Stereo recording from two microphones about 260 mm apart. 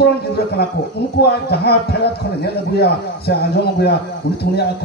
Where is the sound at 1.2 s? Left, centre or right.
Left.